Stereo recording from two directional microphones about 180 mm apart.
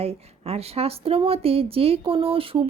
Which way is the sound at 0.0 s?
35° right (ahead or behind).